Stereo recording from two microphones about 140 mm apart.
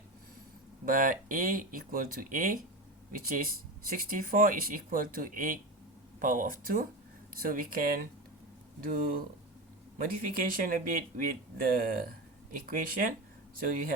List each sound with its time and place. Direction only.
0.9 s speech: 75° right (ahead or behind)
7.3 s speech: 90° right
10.0 s speech: 85° right